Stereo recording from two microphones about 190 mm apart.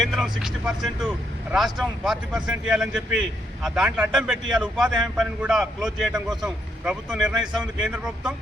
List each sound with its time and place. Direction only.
0.0 s speech: centre (ahead or behind)